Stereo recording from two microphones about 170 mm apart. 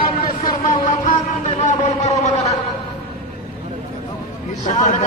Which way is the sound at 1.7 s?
45° left (ahead or behind).